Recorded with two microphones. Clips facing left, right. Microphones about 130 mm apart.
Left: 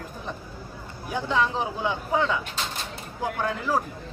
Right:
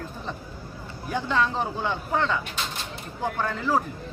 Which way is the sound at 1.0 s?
10° left (ahead or behind).